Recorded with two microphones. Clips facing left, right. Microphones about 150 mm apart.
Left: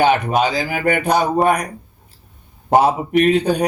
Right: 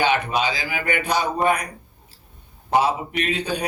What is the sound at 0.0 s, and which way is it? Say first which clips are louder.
Speech: left 6 dB; 50° left (ahead or behind).